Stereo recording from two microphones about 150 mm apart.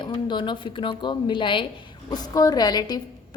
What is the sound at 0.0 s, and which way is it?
A woman's voice, 30° left (ahead or behind).